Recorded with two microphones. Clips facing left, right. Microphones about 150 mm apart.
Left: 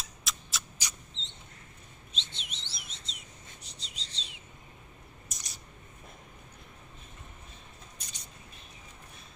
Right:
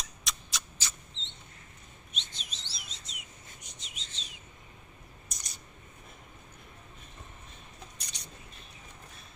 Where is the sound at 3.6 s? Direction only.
35° left (ahead or behind).